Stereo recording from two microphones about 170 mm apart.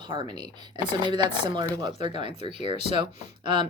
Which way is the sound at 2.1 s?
30° right (ahead or behind).